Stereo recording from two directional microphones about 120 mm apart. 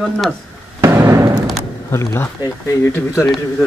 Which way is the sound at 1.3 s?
Centre (ahead or behind).